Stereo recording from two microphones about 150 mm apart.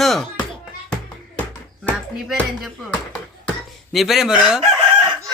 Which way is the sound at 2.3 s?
Centre (ahead or behind).